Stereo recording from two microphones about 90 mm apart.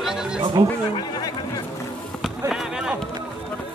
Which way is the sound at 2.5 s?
10° right (ahead or behind).